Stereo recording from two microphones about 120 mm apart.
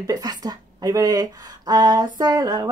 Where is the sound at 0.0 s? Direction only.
35° right (ahead or behind).